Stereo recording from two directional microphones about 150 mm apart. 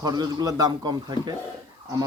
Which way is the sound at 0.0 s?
25° right (ahead or behind).